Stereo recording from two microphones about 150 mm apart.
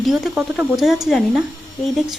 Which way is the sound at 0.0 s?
Centre (ahead or behind).